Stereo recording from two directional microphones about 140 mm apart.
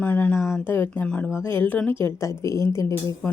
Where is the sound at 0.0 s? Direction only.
10° left (ahead or behind).